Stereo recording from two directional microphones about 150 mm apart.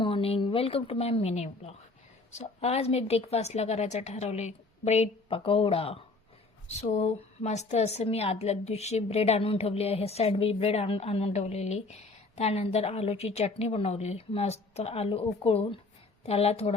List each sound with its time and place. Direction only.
0.0 s a woman's voice: 40° left (ahead or behind)